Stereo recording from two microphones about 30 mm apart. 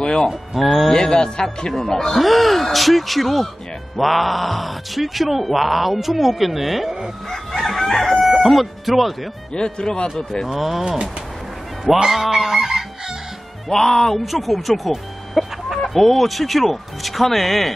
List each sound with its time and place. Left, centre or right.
0.0 s speech: left
0.3 s speech: centre
0.9 s speech: left
2.0 s speech: centre
7.5 s crowing: centre
9.5 s speech: left
10.0 s speech: centre
10.5 s goose: centre
13.7 s speech: centre
14.2 s speech: centre